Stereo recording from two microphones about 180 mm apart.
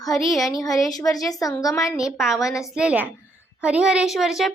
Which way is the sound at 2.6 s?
5° right (ahead or behind).